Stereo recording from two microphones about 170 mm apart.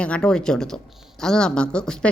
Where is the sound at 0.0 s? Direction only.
5° left (ahead or behind).